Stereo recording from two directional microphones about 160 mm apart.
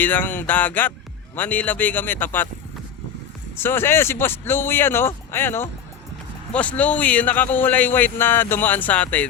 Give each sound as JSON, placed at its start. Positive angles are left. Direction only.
{"t": 0.0, "sound": "a man's voice", "side_deg": 10}
{"t": 3.6, "sound": "a man's voice", "side_deg": 15}